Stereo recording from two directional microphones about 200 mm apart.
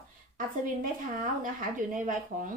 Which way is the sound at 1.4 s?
40° right (ahead or behind).